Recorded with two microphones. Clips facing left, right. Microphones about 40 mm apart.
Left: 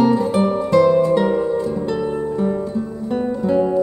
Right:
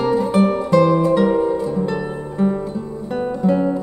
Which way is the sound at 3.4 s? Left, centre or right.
Centre.